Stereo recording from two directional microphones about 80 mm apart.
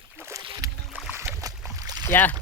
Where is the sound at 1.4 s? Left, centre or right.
Right.